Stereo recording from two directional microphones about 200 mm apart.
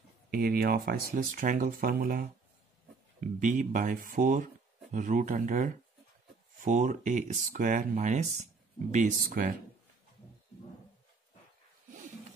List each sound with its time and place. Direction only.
0.3 s speech: 50° right (ahead or behind)
3.3 s speech: 40° right (ahead or behind)